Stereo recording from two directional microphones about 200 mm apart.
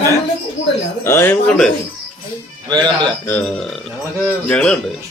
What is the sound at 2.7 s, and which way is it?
Speech, 20° right (ahead or behind).